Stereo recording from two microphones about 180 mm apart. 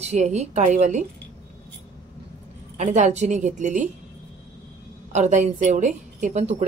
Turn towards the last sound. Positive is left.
turn(degrees=-40)  # may be behind; listen again after turning